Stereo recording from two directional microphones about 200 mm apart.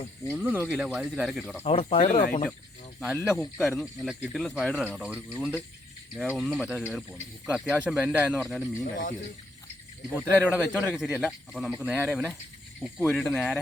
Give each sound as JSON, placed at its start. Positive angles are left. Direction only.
{"t": 0.3, "sound": "speech", "side_deg": -10}
{"t": 1.6, "sound": "speech", "side_deg": 30}
{"t": 3.0, "sound": "speech", "side_deg": 0}
{"t": 8.8, "sound": "speech", "side_deg": 40}
{"t": 10.2, "sound": "speech", "side_deg": -5}